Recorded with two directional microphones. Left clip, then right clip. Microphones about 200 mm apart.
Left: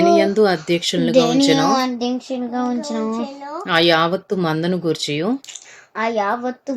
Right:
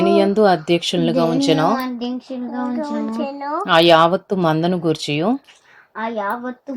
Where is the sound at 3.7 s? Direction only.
5° right (ahead or behind).